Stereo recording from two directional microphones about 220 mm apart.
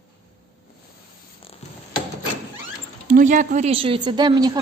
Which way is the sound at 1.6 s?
30° left (ahead or behind).